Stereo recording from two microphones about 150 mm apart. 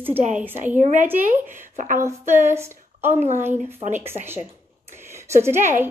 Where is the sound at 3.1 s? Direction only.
50° right (ahead or behind).